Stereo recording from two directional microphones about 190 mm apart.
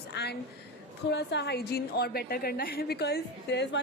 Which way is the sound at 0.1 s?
60° left (ahead or behind).